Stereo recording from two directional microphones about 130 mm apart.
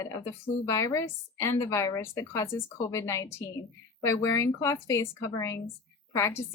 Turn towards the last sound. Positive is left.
turn(degrees=20)  # may be behind; listen again after turning